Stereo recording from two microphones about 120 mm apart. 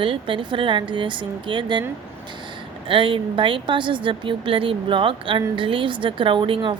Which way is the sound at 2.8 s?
45° right (ahead or behind).